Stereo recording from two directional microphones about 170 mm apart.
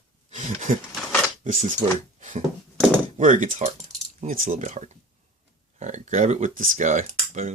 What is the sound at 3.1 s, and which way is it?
Speech, 45° right (ahead or behind).